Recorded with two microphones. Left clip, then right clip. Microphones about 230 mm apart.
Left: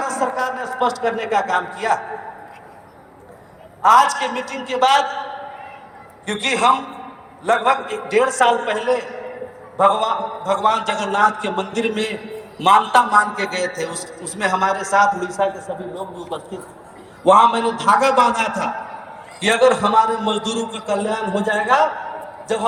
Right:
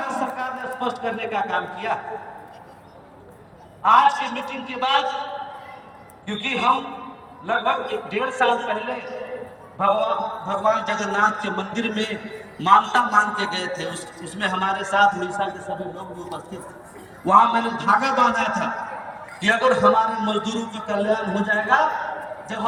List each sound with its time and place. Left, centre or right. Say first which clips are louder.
0.0 s a man's voice: left 5 dB; left
3.8 s a man's voice: left 3 dB; left
6.2 s a man's voice: left 4 dB; left
17.2 s a man's voice: left 3 dB; left